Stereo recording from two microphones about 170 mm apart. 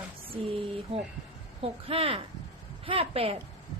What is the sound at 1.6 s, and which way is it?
A woman's voice, 35° right (ahead or behind).